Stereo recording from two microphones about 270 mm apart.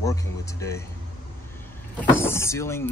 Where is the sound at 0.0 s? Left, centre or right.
Centre.